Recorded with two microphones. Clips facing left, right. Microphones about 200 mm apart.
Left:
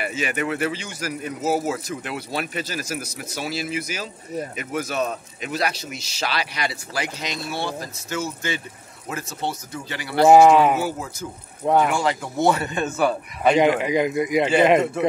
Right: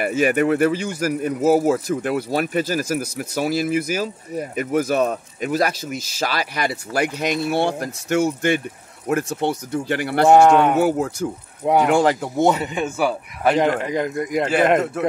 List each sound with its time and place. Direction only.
0.0 s speech: 50° right (ahead or behind)
10.2 s speech: 5° left (ahead or behind)
10.8 s speech: 65° right (ahead or behind)
11.6 s speech: 10° right (ahead or behind)
11.9 s speech: 55° right (ahead or behind)
12.4 s speech: 15° right (ahead or behind); by 15.0 s centre (ahead or behind)